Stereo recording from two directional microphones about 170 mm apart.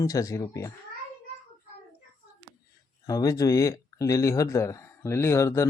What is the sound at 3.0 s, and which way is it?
Speech, 20° left (ahead or behind).